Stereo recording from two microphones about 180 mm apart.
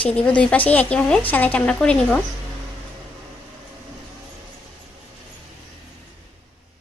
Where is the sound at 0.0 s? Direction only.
5° left (ahead or behind).